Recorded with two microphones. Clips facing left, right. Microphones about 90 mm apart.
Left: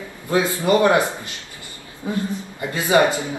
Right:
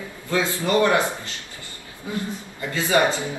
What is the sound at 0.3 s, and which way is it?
A man's voice, 20° left (ahead or behind).